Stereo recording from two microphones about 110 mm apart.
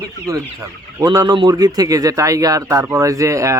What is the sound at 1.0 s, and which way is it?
Speech, 35° right (ahead or behind).